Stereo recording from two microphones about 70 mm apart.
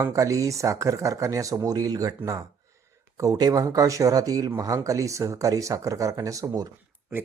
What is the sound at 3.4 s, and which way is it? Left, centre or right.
Speech, right.